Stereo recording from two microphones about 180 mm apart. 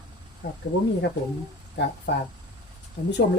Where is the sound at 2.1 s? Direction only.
70° left (ahead or behind).